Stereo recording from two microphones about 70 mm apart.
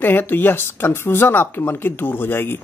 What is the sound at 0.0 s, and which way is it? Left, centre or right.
Speech, left.